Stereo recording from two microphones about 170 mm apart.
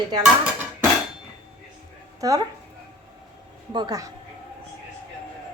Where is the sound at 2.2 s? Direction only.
20° right (ahead or behind).